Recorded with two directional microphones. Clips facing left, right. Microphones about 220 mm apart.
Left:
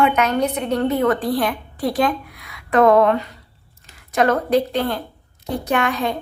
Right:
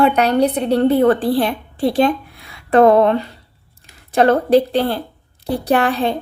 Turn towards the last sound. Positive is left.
turn(degrees=-30)  # may be behind; listen again after turning